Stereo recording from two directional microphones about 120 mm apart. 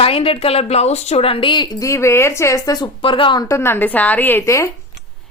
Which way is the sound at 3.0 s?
45° left (ahead or behind).